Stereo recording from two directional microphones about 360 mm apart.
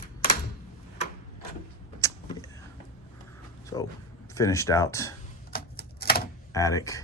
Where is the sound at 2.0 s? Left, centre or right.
Centre.